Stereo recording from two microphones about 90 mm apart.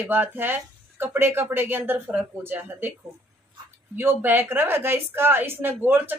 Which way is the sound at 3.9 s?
25° right (ahead or behind).